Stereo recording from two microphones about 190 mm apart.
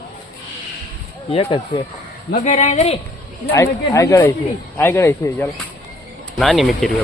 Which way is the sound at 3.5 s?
15° left (ahead or behind).